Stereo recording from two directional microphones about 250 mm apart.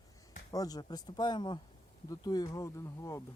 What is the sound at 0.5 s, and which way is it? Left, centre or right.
Speech, centre.